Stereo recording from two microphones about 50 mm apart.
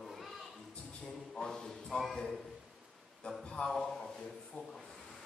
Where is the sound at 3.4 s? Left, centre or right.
Centre.